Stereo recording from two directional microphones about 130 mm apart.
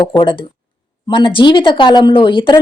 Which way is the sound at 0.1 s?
40° left (ahead or behind).